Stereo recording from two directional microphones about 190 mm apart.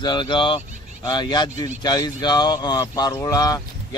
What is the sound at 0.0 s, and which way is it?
Speech, 25° left (ahead or behind).